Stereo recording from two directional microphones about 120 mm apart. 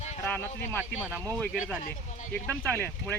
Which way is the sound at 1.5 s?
5° right (ahead or behind).